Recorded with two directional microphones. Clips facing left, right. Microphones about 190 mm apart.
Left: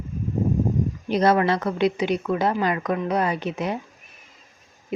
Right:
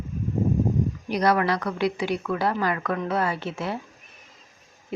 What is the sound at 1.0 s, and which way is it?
Speech, 25° left (ahead or behind).